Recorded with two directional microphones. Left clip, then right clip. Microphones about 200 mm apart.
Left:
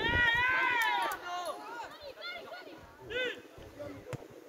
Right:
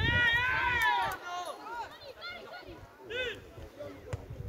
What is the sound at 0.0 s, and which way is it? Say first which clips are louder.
Run: right 1 dB; 55° right (ahead or behind).